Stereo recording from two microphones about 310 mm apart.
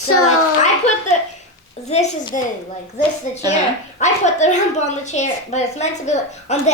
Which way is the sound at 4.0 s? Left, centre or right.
Left.